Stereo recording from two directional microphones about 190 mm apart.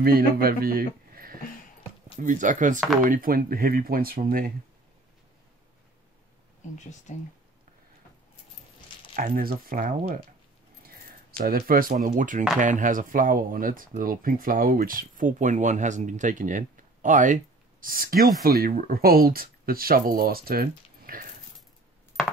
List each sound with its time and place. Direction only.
0.0 s speech: 50° right (ahead or behind)
7.1 s speech: 40° left (ahead or behind)
9.1 s speech: 45° right (ahead or behind)
11.3 s speech: 50° right (ahead or behind)